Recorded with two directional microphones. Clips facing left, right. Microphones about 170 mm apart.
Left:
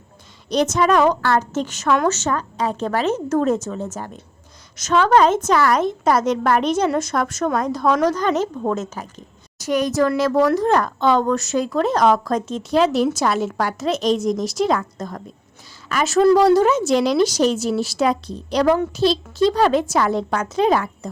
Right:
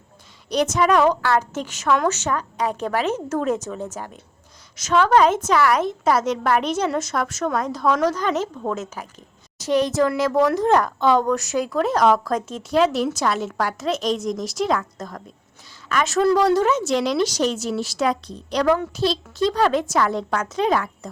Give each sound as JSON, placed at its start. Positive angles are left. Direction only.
{"t": 0.5, "sound": "a woman's voice", "side_deg": -10}
{"t": 9.6, "sound": "a woman's voice", "side_deg": -30}
{"t": 15.9, "sound": "a woman's voice", "side_deg": 5}
{"t": 19.6, "sound": "speech", "side_deg": 30}
{"t": 19.9, "sound": "a woman's voice", "side_deg": 10}
{"t": 20.6, "sound": "speech", "side_deg": 30}